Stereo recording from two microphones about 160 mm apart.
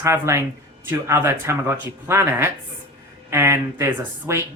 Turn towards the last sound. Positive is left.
turn(degrees=-15)  # may be behind; listen again after turning